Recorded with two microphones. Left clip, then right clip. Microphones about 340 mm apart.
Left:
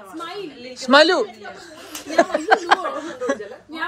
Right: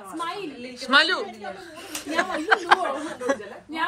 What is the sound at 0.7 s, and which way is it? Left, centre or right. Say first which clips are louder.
Speech: left 6 dB; left.